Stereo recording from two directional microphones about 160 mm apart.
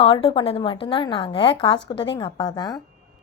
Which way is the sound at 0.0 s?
35° left (ahead or behind).